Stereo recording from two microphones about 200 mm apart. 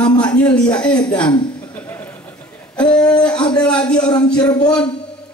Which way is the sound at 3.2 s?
5° left (ahead or behind).